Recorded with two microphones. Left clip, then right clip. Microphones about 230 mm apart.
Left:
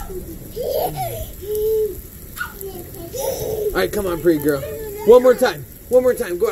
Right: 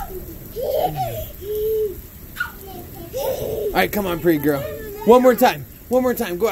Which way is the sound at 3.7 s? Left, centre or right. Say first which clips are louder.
Right 1 dB; right.